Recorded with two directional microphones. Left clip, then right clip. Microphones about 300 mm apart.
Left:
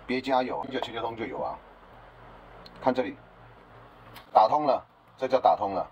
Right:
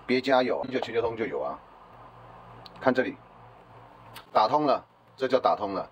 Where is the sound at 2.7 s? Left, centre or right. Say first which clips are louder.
Right 2 dB; right.